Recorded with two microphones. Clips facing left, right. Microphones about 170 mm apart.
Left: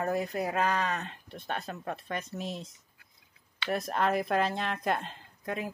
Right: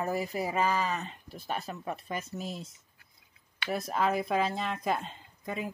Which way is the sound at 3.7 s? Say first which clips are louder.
Left 1 dB; centre (ahead or behind).